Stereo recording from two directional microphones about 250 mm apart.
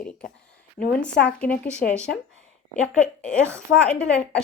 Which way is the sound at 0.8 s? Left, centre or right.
Left.